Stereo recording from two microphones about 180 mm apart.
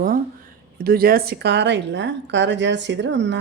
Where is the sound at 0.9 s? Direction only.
55° right (ahead or behind).